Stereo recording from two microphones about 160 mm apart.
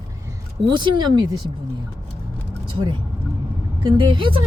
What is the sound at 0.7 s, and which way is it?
Speech, 30° right (ahead or behind).